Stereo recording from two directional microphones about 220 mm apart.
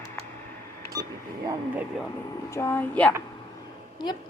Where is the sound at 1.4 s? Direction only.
5° right (ahead or behind).